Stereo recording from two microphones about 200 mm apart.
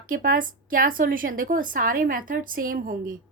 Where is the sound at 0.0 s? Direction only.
45° right (ahead or behind).